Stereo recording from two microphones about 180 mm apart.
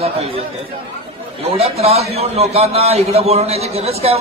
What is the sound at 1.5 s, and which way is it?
A man's voice, 35° right (ahead or behind).